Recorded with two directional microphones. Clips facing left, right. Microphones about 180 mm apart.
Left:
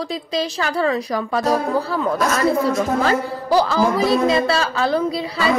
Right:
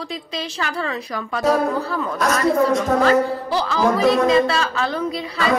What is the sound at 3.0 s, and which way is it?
A woman's voice, 40° left (ahead or behind).